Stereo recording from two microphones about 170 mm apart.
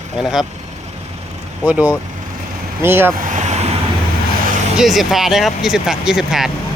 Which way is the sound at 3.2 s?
50° right (ahead or behind).